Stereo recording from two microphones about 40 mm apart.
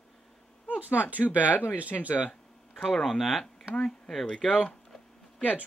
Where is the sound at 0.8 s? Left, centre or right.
Right.